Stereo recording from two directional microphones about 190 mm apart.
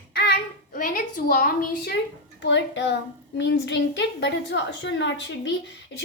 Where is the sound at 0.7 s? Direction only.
50° left (ahead or behind).